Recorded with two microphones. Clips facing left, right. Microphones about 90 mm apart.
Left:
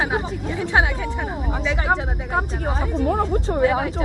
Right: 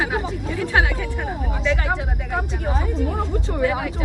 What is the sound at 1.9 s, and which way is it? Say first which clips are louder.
Speech: left 3 dB; 30° left (ahead or behind).